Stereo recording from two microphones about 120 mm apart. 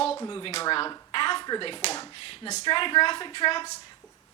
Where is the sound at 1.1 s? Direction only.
45° left (ahead or behind).